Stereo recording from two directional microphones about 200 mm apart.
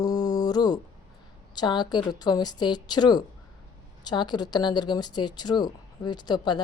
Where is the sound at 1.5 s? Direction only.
20° left (ahead or behind).